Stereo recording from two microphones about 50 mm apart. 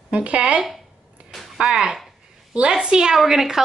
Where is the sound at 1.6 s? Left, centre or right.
Centre.